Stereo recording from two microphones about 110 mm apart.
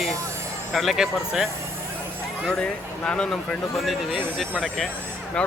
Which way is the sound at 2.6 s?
10° left (ahead or behind).